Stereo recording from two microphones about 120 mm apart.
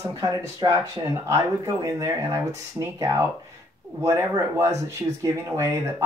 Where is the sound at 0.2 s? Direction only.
30° right (ahead or behind).